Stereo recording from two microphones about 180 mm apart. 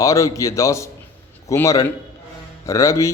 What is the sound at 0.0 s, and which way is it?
A man's voice, 15° left (ahead or behind).